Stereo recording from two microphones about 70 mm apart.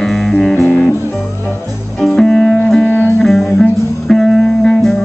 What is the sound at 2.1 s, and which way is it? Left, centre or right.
Music, centre.